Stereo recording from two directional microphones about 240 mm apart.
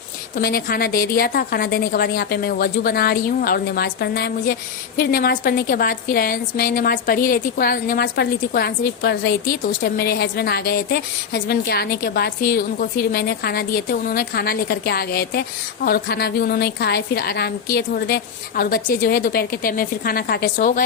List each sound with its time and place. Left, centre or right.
0.3 s a woman's voice: left